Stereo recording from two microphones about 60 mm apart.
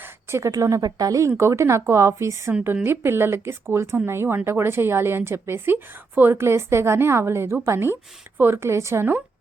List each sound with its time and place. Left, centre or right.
0.0 s a woman's voice: right
1.4 s speech: right
2.5 s a woman's voice: right
5.7 s a woman's voice: right
6.3 s speech: right